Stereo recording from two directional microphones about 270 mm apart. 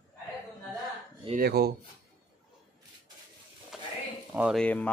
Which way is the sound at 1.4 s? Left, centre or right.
Right.